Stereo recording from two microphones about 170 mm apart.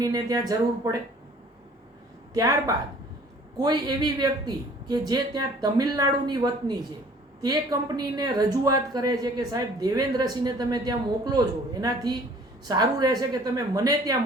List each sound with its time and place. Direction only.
0.0 s speech: 20° right (ahead or behind)
2.3 s speech: 20° right (ahead or behind)